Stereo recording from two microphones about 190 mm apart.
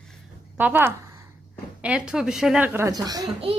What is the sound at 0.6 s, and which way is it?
A child's voice, 10° right (ahead or behind).